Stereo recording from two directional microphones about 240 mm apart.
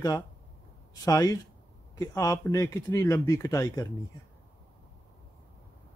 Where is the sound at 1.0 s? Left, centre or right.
Centre.